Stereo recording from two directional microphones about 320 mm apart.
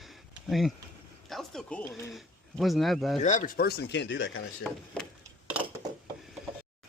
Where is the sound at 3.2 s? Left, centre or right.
Left.